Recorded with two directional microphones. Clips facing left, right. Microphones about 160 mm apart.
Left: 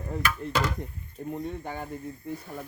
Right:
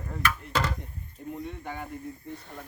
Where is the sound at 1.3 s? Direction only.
35° left (ahead or behind).